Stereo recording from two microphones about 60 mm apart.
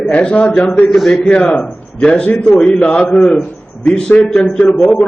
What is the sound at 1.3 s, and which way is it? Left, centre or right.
A man's voice, centre.